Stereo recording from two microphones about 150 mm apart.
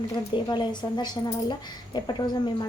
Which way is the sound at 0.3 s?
30° left (ahead or behind).